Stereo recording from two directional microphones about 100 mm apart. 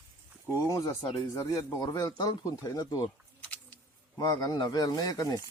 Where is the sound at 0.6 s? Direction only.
30° left (ahead or behind).